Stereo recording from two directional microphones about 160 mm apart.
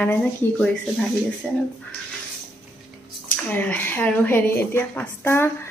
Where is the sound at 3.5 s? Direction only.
10° left (ahead or behind).